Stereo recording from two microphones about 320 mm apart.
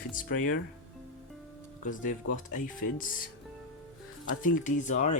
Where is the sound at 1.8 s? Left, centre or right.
Left.